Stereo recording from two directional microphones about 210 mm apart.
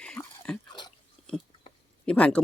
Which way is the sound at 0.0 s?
5° left (ahead or behind).